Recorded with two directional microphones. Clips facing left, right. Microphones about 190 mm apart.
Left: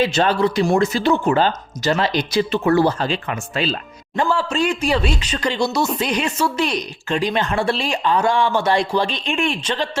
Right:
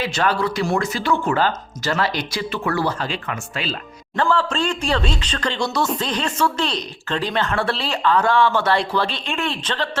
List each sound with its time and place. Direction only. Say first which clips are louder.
0.0 s speech: left 4 dB; 25° left (ahead or behind)
4.2 s a woman's voice: left 1 dB; 10° left (ahead or behind)